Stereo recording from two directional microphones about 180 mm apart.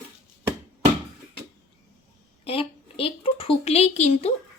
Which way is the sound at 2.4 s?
30° left (ahead or behind).